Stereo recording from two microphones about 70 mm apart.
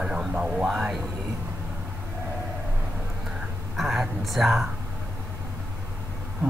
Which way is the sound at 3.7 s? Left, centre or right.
Centre.